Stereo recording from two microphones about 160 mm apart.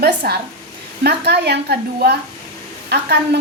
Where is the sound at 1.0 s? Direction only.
90° right.